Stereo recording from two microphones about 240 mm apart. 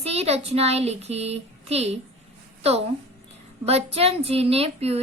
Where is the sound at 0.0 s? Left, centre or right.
Right.